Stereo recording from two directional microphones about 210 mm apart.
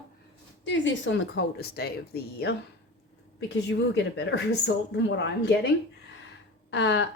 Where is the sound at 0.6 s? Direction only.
60° left (ahead or behind).